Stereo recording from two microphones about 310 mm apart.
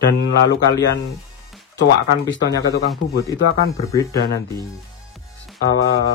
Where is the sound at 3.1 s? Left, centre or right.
Centre.